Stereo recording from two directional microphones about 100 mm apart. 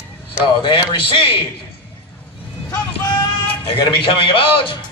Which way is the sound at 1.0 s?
60° left (ahead or behind).